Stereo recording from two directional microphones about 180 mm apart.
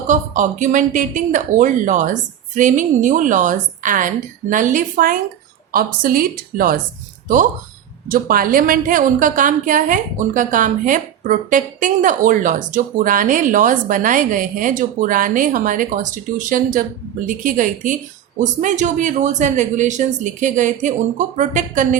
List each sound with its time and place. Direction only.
0.1 s a woman's voice: 45° right (ahead or behind)
8.0 s a woman's voice: 50° right (ahead or behind)